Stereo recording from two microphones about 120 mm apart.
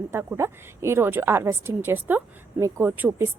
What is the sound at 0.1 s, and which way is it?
A woman's voice, 20° right (ahead or behind).